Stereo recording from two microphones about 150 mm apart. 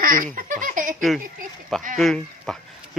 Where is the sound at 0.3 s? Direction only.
60° right (ahead or behind).